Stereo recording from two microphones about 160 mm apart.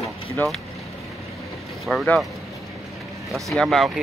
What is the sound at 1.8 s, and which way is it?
Speech, centre (ahead or behind).